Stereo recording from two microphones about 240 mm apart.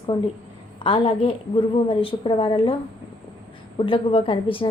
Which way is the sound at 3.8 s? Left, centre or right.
Left.